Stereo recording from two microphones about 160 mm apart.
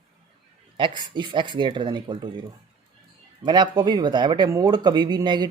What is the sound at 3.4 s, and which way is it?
Speech, 30° right (ahead or behind).